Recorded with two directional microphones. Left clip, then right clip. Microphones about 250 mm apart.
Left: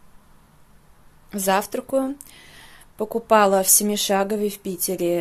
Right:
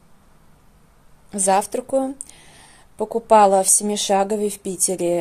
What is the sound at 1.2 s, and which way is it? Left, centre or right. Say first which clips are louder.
Speech: right 3 dB; centre.